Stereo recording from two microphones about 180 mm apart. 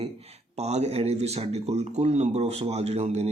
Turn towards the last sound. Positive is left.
turn(degrees=-35)  # may be behind; listen again after turning